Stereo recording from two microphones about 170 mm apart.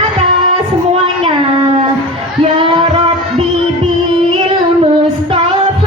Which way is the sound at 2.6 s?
30° right (ahead or behind).